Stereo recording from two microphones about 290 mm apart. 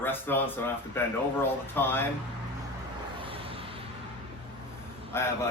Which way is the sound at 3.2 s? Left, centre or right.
Centre.